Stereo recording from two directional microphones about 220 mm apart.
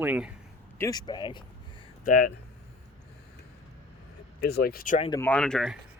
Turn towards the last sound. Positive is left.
turn(degrees=0)  # may be behind; listen again after turning